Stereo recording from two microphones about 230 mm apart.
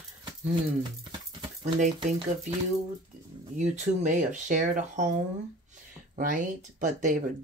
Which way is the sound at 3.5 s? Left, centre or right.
Right.